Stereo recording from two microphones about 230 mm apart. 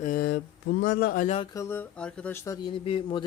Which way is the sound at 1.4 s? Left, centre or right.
Centre.